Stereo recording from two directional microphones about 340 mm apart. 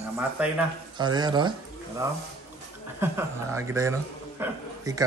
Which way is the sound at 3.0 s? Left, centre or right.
Centre.